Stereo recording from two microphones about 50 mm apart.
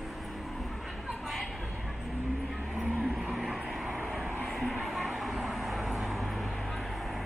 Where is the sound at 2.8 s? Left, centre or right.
Right.